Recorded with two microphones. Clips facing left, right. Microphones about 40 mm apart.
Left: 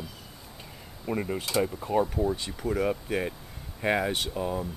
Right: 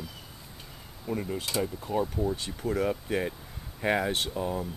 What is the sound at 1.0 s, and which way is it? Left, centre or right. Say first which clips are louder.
Speech: left 2 dB; left.